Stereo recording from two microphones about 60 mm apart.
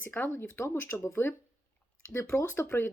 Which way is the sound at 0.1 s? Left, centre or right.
Left.